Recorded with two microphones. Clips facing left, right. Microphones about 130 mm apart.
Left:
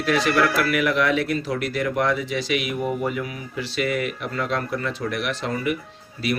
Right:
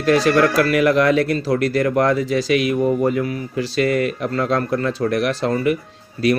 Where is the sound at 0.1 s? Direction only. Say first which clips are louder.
Right 6 dB; 35° right (ahead or behind).